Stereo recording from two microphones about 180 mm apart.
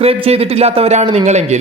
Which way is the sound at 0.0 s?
35° right (ahead or behind).